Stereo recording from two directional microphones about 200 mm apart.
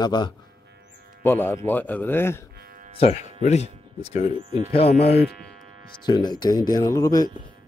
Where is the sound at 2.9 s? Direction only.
30° left (ahead or behind).